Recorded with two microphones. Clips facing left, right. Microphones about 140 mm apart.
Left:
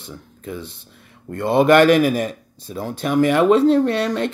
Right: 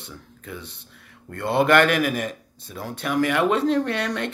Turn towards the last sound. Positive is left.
turn(degrees=25)  # may be behind; listen again after turning